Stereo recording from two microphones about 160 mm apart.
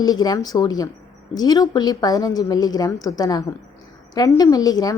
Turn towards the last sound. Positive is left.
turn(degrees=25)  # may be behind; listen again after turning